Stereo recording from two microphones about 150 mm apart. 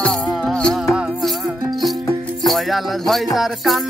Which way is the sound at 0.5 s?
5° left (ahead or behind).